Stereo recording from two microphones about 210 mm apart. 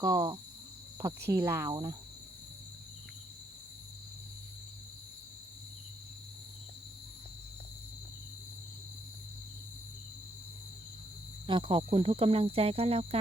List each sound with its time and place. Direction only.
0.0 s speech: 15° right (ahead or behind)
11.4 s speech: 25° right (ahead or behind)